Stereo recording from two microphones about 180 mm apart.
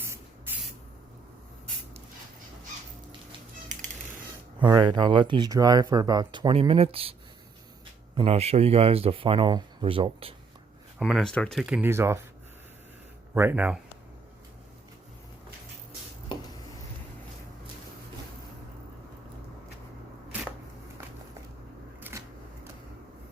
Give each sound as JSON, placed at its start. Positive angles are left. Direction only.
{"t": 0.0, "sound": "spray", "side_deg": -10}
{"t": 4.6, "sound": "speech", "side_deg": -25}
{"t": 11.0, "sound": "speech", "side_deg": 0}
{"t": 13.3, "sound": "speech", "side_deg": -10}